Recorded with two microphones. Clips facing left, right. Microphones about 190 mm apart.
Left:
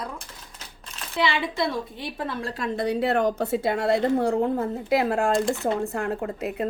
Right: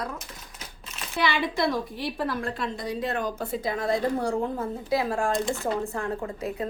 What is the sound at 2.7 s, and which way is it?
A woman's voice, 65° left (ahead or behind).